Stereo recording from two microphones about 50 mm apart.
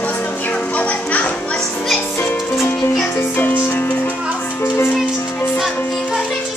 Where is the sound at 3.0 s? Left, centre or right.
Left.